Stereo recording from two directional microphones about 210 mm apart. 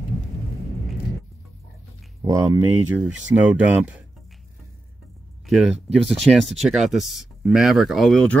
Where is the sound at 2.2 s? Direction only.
15° right (ahead or behind).